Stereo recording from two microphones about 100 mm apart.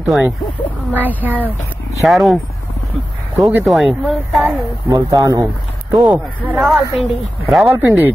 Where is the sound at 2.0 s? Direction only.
Centre (ahead or behind).